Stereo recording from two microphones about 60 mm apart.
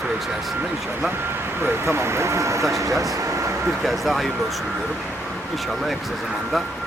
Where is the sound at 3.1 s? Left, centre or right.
Right.